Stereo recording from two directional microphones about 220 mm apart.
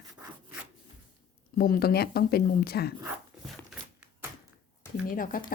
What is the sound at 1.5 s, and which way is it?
Speech, 40° left (ahead or behind).